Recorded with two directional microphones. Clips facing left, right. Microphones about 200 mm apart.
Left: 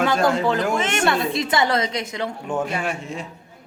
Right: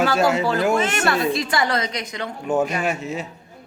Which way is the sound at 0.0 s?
5° right (ahead or behind).